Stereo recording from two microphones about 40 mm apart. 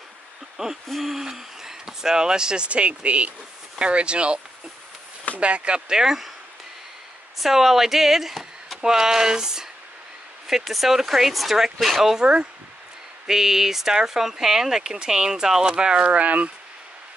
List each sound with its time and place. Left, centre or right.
0.8 s speech: centre; by 4.4 s right
5.4 s speech: right
5.9 s speech: centre
7.3 s speech: centre
10.4 s speech: centre; by 16.5 s right